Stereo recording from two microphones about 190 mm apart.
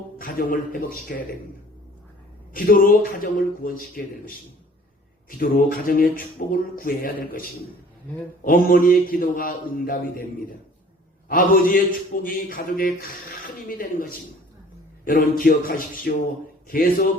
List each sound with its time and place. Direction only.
0.2 s a man's voice: 50° left (ahead or behind)
2.5 s speech: 50° left (ahead or behind)
5.4 s speech: 50° left (ahead or behind)
8.4 s speech: 50° left (ahead or behind)
11.3 s speech: 50° left (ahead or behind)